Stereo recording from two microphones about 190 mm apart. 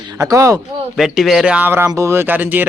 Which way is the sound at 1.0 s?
Centre (ahead or behind).